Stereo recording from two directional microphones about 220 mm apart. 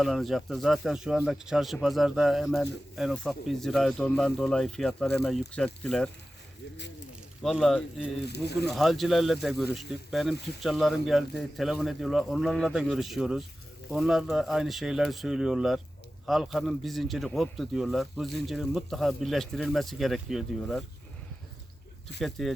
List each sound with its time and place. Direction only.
0.0 s speech: centre (ahead or behind)
7.4 s speech: centre (ahead or behind)
8.3 s speech: 50° left (ahead or behind)
8.6 s speech: centre (ahead or behind)
22.2 s speech: centre (ahead or behind)